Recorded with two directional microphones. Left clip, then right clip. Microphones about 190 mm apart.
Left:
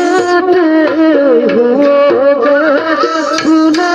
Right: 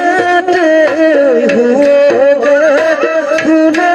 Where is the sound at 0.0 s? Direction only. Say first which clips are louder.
Even; 60° left (ahead or behind).